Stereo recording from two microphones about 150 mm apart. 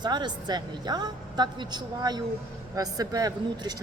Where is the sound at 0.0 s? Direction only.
30° right (ahead or behind).